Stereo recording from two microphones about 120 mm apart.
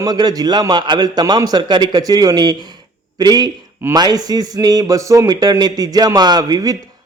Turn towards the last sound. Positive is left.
turn(degrees=-30)  # may be behind; listen again after turning